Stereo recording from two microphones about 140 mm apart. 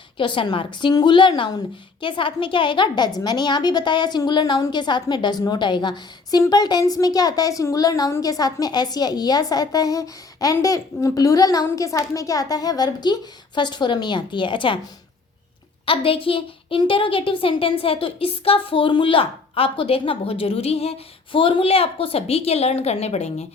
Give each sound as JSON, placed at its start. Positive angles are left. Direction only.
{"t": 0.2, "sound": "a woman's voice", "side_deg": 35}
{"t": 15.9, "sound": "a woman's voice", "side_deg": 40}